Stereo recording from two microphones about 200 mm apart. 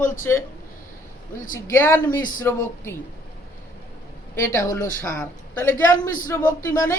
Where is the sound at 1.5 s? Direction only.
10° left (ahead or behind).